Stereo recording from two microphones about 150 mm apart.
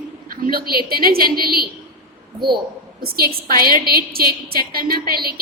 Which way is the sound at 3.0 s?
90° right.